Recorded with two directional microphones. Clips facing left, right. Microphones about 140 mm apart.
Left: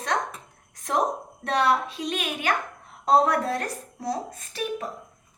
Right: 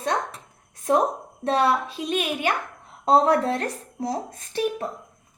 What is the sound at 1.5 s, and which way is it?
A woman's voice, 25° right (ahead or behind).